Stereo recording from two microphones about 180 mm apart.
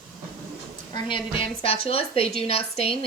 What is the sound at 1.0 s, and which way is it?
Speech, 30° left (ahead or behind).